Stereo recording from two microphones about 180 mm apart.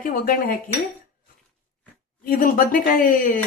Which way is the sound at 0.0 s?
50° left (ahead or behind).